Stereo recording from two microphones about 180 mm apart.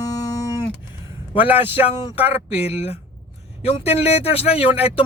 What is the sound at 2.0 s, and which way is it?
Speech, 35° left (ahead or behind).